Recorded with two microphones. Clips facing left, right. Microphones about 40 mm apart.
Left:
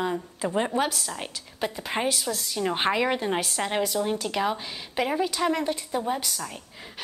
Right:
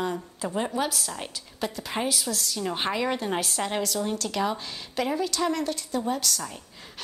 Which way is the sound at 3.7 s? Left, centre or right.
Centre.